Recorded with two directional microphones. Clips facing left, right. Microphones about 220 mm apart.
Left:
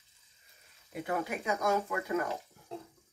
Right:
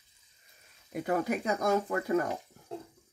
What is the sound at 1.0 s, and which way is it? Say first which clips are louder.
Speech: right 4 dB; 40° right (ahead or behind).